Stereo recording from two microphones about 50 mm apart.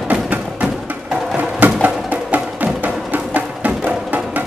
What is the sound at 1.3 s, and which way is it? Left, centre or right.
Music, right.